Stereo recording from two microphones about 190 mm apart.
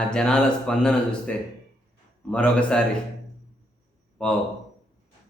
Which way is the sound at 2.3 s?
5° left (ahead or behind).